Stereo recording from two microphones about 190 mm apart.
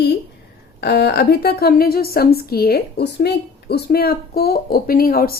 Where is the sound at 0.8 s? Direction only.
60° left (ahead or behind).